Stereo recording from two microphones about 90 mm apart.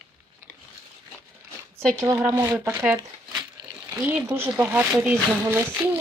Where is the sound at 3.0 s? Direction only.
50° right (ahead or behind).